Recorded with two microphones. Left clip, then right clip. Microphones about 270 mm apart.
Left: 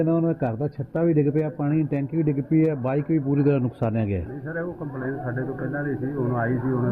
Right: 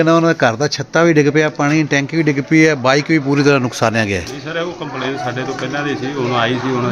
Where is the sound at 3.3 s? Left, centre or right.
Centre.